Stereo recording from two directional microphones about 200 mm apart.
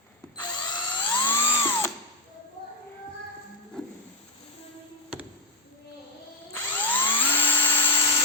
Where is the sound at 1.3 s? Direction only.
15° left (ahead or behind).